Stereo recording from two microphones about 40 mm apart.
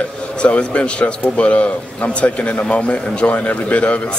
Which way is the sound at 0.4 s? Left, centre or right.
Left.